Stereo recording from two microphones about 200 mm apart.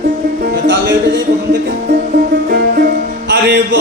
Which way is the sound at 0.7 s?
65° right (ahead or behind).